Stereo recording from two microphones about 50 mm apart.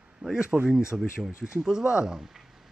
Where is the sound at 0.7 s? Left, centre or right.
Centre.